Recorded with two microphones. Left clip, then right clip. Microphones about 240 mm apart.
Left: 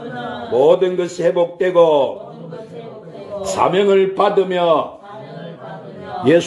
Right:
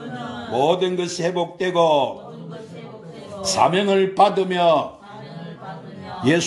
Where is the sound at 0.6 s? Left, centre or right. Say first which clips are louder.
Left 6 dB; right.